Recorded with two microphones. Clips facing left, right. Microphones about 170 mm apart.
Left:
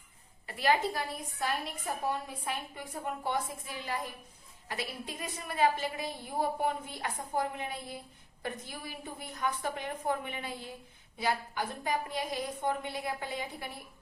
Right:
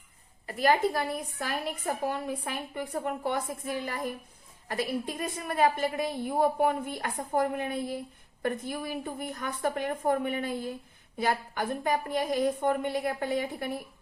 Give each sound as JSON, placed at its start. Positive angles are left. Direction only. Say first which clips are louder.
{"t": 0.4, "sound": "a woman's voice", "louder": "right 4 dB", "side_deg": -45}
{"t": 1.4, "sound": "a woman's voice", "louder": "right 2 dB", "side_deg": -60}